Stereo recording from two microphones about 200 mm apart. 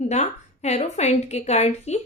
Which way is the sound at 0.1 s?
35° left (ahead or behind).